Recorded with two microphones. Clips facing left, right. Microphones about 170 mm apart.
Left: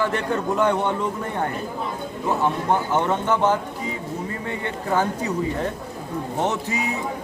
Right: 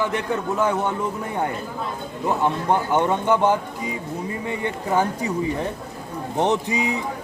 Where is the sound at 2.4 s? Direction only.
15° right (ahead or behind).